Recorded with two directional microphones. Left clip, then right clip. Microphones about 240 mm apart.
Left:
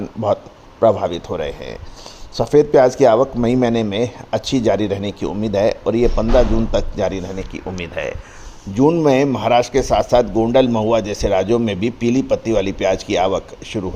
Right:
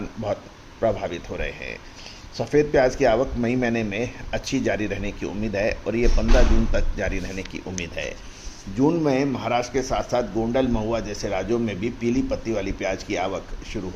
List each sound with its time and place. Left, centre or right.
0.8 s a man's voice: left
1.5 s speech: left
2.3 s a man's voice: left
7.9 s speech: centre
8.7 s speech: left